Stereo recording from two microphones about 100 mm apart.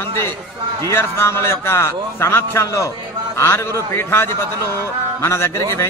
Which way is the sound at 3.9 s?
25° left (ahead or behind).